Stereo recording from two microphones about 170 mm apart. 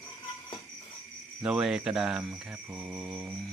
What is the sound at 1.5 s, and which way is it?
Speech, 5° right (ahead or behind).